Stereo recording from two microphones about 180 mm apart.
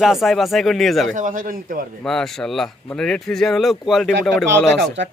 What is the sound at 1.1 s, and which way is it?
Speech, 45° right (ahead or behind).